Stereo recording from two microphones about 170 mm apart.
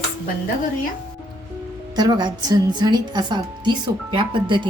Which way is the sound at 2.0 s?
25° right (ahead or behind).